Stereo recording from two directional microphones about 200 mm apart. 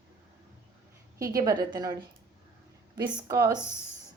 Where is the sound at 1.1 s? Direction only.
15° right (ahead or behind).